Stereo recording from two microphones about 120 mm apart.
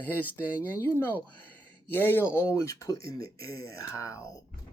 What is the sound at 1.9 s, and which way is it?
Speech, 15° left (ahead or behind).